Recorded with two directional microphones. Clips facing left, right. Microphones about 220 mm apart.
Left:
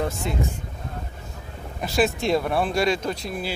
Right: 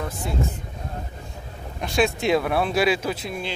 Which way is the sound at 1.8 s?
Centre (ahead or behind).